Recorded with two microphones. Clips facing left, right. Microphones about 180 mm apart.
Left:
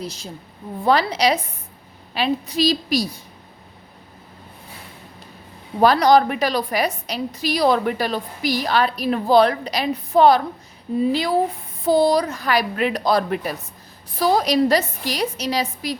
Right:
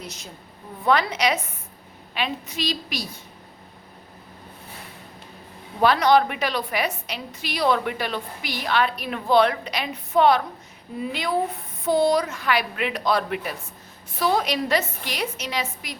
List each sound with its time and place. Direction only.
0.0 s a woman's voice: 30° left (ahead or behind)
5.8 s a woman's voice: 40° left (ahead or behind)